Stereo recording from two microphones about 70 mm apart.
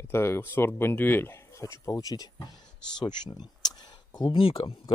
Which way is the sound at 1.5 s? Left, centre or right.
Left.